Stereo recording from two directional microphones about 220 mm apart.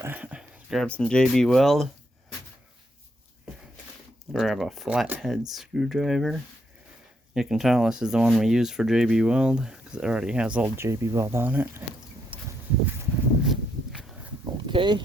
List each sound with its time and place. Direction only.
0.0 s speech: 5° right (ahead or behind)
4.3 s speech: centre (ahead or behind)
13.4 s walk: centre (ahead or behind)
14.7 s speech: 20° right (ahead or behind)